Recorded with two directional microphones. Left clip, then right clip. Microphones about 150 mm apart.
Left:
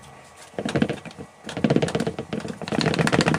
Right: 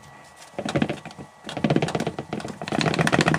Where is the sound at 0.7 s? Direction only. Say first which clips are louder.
Left 1 dB; 5° right (ahead or behind).